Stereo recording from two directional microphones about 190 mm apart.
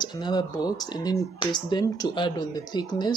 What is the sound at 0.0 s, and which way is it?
Speech, 20° left (ahead or behind).